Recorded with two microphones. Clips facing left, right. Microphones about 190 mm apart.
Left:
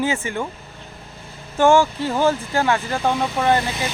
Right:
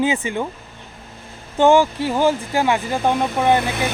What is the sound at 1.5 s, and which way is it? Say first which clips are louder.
Speech: right 1 dB; 15° right (ahead or behind).